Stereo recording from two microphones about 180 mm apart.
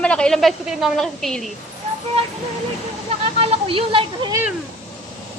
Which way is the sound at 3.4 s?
35° right (ahead or behind).